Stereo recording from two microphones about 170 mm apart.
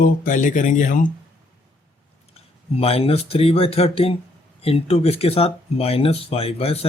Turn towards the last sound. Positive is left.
turn(degrees=35)  # may be behind; listen again after turning